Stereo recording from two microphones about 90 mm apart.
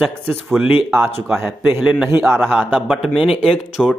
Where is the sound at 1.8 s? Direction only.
10° right (ahead or behind).